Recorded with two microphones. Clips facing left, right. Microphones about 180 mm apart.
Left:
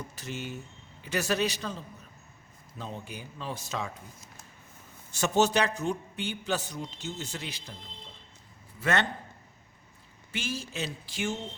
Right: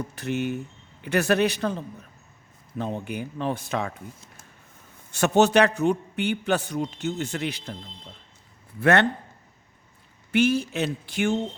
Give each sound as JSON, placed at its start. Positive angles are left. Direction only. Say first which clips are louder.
{"t": 0.2, "sound": "a man's voice", "louder": "right 12 dB", "side_deg": -60}
{"t": 5.1, "sound": "a man's voice", "louder": "right 6 dB", "side_deg": -65}
{"t": 8.8, "sound": "a man's voice", "louder": "right 8 dB", "side_deg": -60}
{"t": 10.3, "sound": "a man's voice", "louder": "right 13 dB", "side_deg": -60}